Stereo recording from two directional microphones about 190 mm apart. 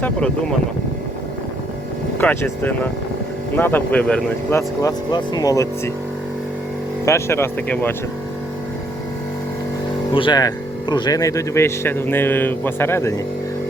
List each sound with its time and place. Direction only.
2.1 s speech: 10° left (ahead or behind)
4.8 s speech: 20° left (ahead or behind)
7.0 s speech: 15° left (ahead or behind)
10.2 s speech: 25° left (ahead or behind)